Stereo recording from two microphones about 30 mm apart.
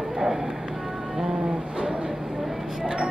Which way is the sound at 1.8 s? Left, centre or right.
Right.